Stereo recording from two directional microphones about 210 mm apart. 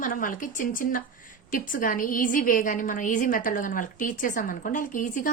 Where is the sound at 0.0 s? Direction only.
40° left (ahead or behind).